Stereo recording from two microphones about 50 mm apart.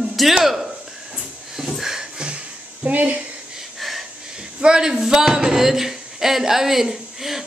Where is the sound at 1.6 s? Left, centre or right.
Centre.